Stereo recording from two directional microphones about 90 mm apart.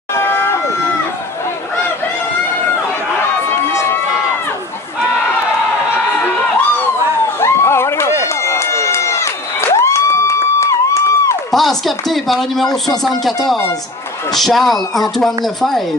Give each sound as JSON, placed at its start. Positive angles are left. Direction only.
{"t": 0.1, "sound": "crowd", "side_deg": 25}
{"t": 7.3, "sound": "a sound", "side_deg": 30}
{"t": 8.5, "sound": "crowd", "side_deg": 30}
{"t": 11.5, "sound": "speech", "side_deg": 0}